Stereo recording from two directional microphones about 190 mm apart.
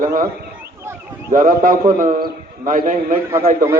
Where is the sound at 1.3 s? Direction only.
45° right (ahead or behind).